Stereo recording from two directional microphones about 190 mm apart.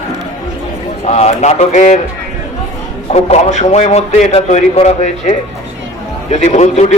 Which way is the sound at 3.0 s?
35° left (ahead or behind).